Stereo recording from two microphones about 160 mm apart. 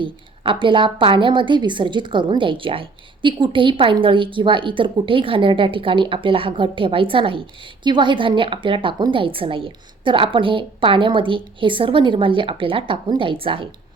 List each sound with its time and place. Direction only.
0.0 s a woman's voice: 30° right (ahead or behind)